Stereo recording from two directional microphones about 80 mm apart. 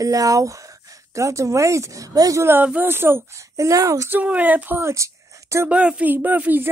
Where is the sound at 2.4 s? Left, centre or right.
Right.